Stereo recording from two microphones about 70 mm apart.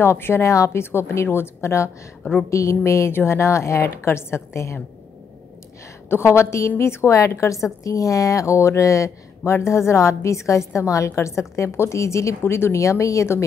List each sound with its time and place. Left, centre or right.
0.0 s a woman's voice: left
6.0 s a woman's voice: left